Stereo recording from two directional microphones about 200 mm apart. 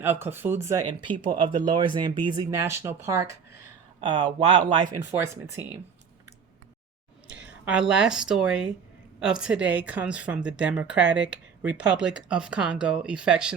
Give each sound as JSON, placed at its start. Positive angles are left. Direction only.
{"t": 0.0, "sound": "speech", "side_deg": -10}
{"t": 4.0, "sound": "speech", "side_deg": -25}
{"t": 4.9, "sound": "speech", "side_deg": -15}
{"t": 7.3, "sound": "speech", "side_deg": -5}